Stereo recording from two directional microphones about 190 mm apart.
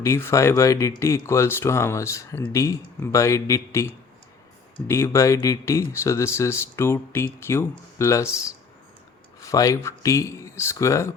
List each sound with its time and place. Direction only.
0.0 s speech: 15° left (ahead or behind)
9.4 s speech: 15° left (ahead or behind)